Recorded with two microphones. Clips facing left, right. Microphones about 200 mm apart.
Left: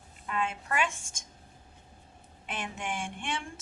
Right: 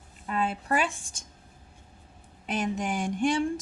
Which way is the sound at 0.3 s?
35° right (ahead or behind).